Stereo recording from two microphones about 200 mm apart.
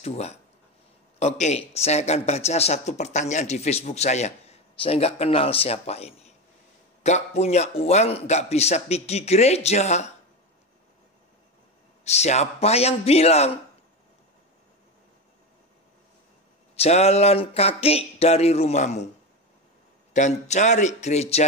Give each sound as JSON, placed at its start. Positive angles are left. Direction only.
{"t": 0.0, "sound": "speech", "side_deg": 35}
{"t": 12.0, "sound": "speech", "side_deg": 35}
{"t": 16.7, "sound": "speech", "side_deg": 30}
{"t": 20.1, "sound": "speech", "side_deg": 35}